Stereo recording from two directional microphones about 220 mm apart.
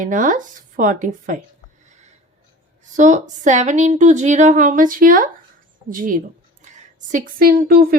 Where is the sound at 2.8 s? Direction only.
35° right (ahead or behind).